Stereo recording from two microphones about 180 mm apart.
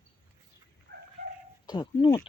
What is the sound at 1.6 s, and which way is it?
Speech, 25° left (ahead or behind).